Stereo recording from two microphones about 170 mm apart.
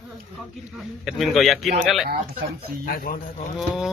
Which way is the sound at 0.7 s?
Centre (ahead or behind).